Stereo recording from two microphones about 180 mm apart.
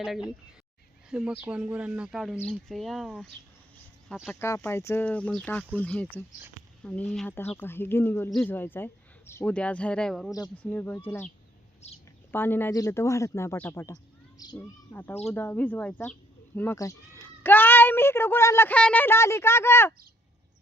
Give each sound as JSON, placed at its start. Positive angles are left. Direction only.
{"t": 0.0, "sound": "speech", "side_deg": -5}
{"t": 11.8, "sound": "a woman's voice", "side_deg": 40}
{"t": 12.3, "sound": "speech", "side_deg": 10}